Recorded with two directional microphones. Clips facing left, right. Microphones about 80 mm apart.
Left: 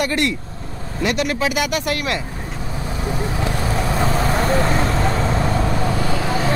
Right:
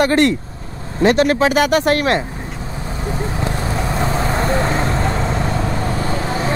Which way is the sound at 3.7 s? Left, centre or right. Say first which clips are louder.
Left 1 dB; centre.